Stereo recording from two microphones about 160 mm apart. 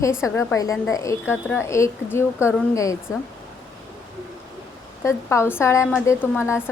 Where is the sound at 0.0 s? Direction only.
20° left (ahead or behind).